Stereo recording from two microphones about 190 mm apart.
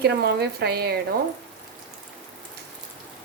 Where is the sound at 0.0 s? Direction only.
55° right (ahead or behind).